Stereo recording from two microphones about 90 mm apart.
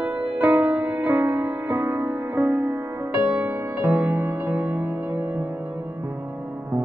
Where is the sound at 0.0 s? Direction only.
20° right (ahead or behind).